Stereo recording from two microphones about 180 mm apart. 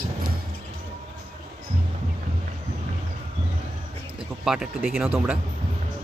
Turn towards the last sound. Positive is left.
turn(degrees=-5)  # may be behind; listen again after turning